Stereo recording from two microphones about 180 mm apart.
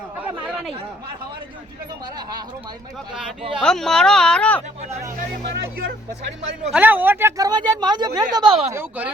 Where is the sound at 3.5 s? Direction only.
Centre (ahead or behind).